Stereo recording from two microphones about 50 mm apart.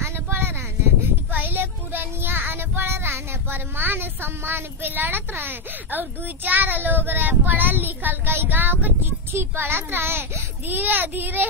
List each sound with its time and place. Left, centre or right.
0.0 s a sound: right
1.3 s child singing: right
10.7 s a child's voice: right